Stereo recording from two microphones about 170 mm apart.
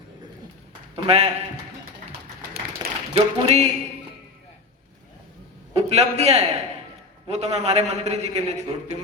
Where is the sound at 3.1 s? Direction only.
40° right (ahead or behind).